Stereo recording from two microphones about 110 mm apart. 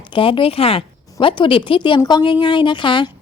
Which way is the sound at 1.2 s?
50° left (ahead or behind).